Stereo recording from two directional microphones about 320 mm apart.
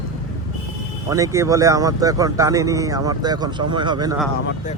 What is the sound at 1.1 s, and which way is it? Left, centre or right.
Speech, centre.